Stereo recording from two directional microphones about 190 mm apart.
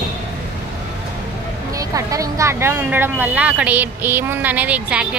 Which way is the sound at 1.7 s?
15° right (ahead or behind).